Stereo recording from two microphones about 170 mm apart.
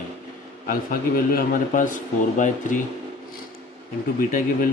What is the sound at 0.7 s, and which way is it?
A man's voice, 55° left (ahead or behind).